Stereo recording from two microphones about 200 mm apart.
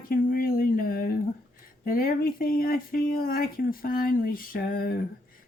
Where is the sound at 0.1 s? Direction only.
45° left (ahead or behind).